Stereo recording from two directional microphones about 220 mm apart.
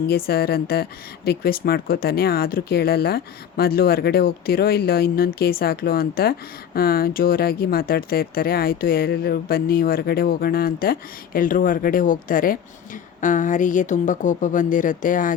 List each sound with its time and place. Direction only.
0.3 s speech: 45° left (ahead or behind)